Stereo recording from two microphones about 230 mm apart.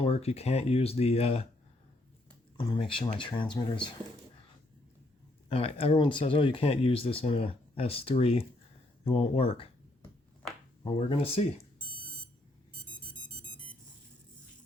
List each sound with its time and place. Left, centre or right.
0.0 s speech: left
2.6 s speech: left
5.5 s speech: left